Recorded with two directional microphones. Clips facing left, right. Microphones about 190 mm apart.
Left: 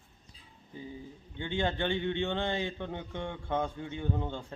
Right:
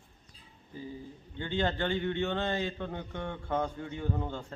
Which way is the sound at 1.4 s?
15° left (ahead or behind).